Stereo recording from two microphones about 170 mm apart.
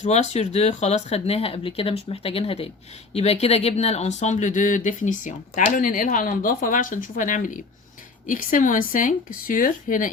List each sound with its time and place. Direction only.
0.0 s speech: 40° left (ahead or behind)